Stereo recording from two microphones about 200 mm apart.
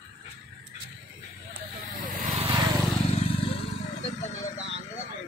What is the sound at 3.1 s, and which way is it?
Vehicle, 30° left (ahead or behind).